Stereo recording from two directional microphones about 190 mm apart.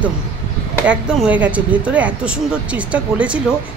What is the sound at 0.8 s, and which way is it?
Speech, 5° right (ahead or behind).